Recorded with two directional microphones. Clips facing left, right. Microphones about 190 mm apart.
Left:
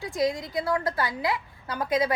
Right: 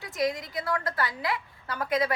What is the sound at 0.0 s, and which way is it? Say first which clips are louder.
A woman's voice: left 3 dB; 25° left (ahead or behind).